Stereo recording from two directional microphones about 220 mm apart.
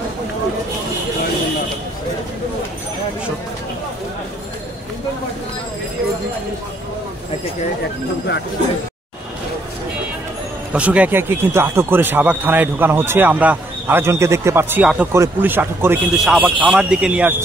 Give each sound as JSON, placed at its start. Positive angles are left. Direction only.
{"t": 10.7, "sound": "speech", "side_deg": -5}